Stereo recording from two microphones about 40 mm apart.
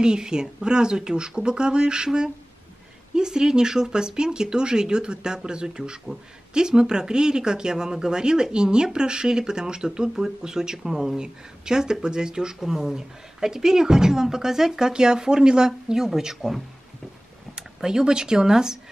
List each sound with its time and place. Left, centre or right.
0.0 s speech: centre